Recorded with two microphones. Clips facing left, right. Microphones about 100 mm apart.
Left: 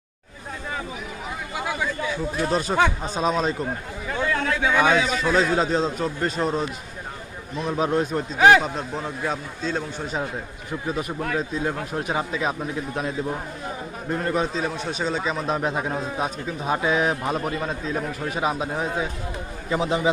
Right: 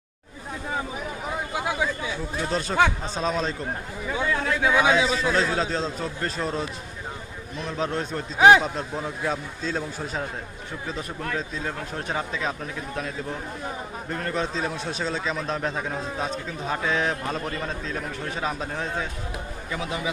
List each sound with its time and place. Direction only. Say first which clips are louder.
2.4 s a man's voice: left 1 dB; 10° left (ahead or behind)
4.0 s speech: left 1 dB; 5° right (ahead or behind)
7.6 s a man's voice: left 5 dB; 15° left (ahead or behind)
8.4 s speech: even; 15° right (ahead or behind)
8.6 s a man's voice: left 1 dB; 5° left (ahead or behind)
19.7 s a man's voice: left 8 dB; 30° left (ahead or behind)